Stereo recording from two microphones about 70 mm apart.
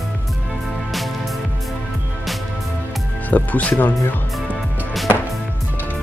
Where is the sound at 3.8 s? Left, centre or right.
Left.